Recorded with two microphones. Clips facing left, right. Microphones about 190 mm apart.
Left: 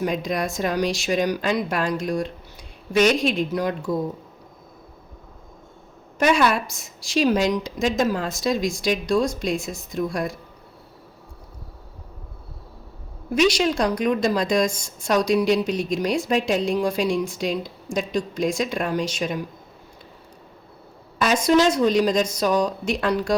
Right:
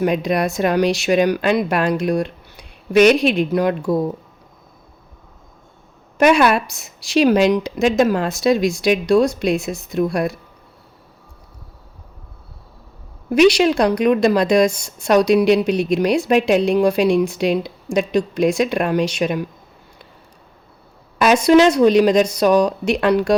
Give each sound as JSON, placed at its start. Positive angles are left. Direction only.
{"t": 0.0, "sound": "a woman's voice", "side_deg": -65}
{"t": 6.1, "sound": "a woman's voice", "side_deg": -65}
{"t": 13.3, "sound": "a woman's voice", "side_deg": -65}
{"t": 21.2, "sound": "a woman's voice", "side_deg": -70}